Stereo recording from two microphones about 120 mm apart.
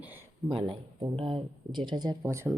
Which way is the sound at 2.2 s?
20° right (ahead or behind).